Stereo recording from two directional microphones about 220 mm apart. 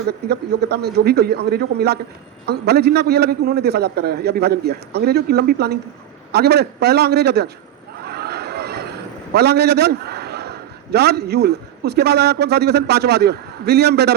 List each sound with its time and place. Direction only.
0.3 s a man's voice: 45° right (ahead or behind)
8.0 s a sound: 45° right (ahead or behind)
9.3 s a man's voice: 50° right (ahead or behind)